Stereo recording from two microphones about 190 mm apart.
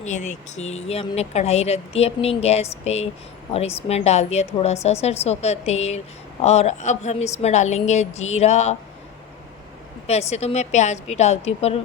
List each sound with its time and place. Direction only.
0.0 s a woman's voice: 40° left (ahead or behind)
10.1 s a woman's voice: 35° left (ahead or behind)